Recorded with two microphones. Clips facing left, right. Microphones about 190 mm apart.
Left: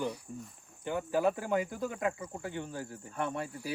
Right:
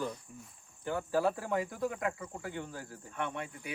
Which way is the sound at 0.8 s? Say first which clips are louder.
Left 1 dB; 20° left (ahead or behind).